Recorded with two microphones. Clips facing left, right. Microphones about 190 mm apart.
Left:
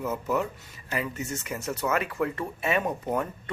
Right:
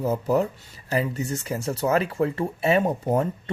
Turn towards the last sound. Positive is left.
turn(degrees=-30)  # may be behind; listen again after turning